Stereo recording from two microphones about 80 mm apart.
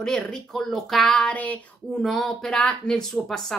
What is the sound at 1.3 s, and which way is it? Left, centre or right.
Speech, centre.